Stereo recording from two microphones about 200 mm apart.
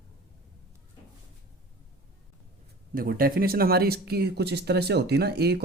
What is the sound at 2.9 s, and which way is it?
Speech, 45° right (ahead or behind).